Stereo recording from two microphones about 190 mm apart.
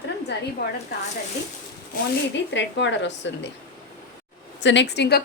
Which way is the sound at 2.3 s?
70° left (ahead or behind).